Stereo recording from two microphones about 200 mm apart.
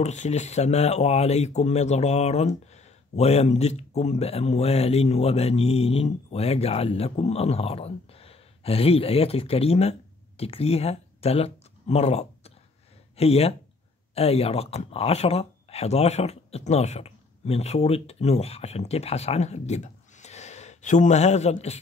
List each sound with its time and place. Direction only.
0.0 s speech: 35° left (ahead or behind)